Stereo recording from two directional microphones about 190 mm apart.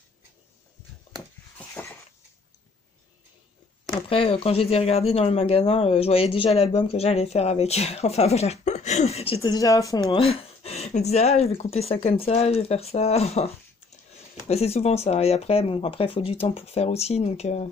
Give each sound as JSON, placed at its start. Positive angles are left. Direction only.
{"t": 4.1, "sound": "speech", "side_deg": 30}
{"t": 9.4, "sound": "speech", "side_deg": 20}
{"t": 10.1, "sound": "speech", "side_deg": 30}
{"t": 14.5, "sound": "speech", "side_deg": 35}